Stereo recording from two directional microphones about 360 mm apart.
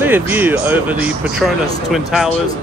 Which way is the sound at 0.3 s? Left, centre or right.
Centre.